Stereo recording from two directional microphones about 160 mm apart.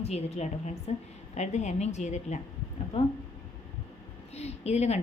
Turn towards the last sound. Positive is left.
turn(degrees=45)  # may be behind; listen again after turning